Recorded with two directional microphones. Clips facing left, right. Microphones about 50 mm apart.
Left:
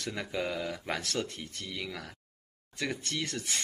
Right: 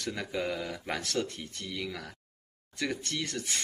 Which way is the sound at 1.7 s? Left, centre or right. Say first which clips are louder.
Right 2 dB; centre.